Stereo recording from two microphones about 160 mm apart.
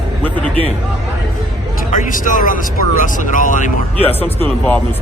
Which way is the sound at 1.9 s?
55° left (ahead or behind).